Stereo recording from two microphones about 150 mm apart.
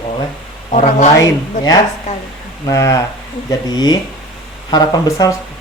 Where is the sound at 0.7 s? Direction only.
50° left (ahead or behind).